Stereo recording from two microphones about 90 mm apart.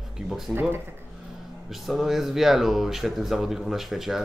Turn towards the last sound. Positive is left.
turn(degrees=-5)  # may be behind; listen again after turning